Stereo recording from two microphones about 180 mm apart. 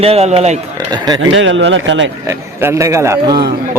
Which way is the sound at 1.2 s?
90° right.